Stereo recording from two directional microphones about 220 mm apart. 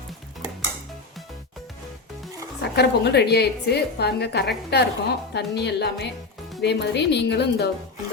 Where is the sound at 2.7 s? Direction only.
50° left (ahead or behind).